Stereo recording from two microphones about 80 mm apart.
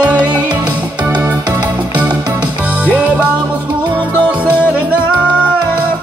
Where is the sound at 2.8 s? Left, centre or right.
Centre.